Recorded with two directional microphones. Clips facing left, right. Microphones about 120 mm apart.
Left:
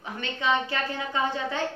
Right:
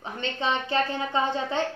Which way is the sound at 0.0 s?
30° right (ahead or behind).